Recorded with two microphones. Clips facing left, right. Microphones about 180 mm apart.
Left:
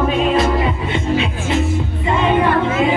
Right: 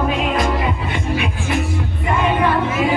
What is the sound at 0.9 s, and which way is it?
Music, 25° left (ahead or behind).